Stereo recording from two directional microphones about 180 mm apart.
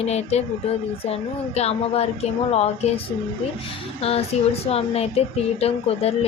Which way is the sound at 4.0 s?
35° left (ahead or behind).